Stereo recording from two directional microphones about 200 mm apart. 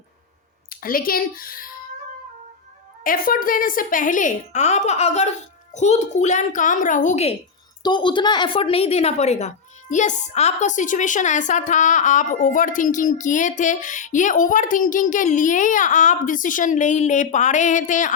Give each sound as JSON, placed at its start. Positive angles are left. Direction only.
{"t": 0.7, "sound": "a woman's voice", "side_deg": 45}
{"t": 3.0, "sound": "a woman's voice", "side_deg": 45}
{"t": 7.8, "sound": "a woman's voice", "side_deg": 20}